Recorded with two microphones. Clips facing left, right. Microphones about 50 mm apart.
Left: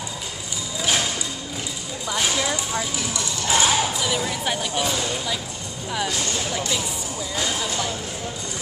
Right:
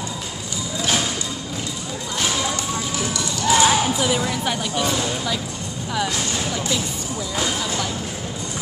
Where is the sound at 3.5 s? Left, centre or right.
Centre.